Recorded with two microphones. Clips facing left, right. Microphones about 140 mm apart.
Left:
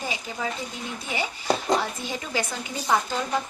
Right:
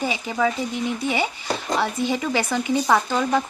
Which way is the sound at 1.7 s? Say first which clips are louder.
Right 6 dB; 85° right.